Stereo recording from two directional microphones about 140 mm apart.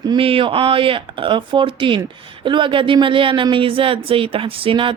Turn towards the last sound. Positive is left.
turn(degrees=-40)  # may be behind; listen again after turning